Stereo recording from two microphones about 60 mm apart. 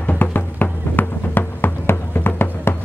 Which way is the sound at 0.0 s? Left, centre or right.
Left.